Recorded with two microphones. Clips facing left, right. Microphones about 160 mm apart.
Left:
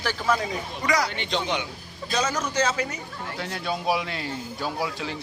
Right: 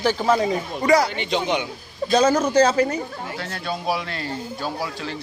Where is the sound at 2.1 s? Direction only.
30° right (ahead or behind).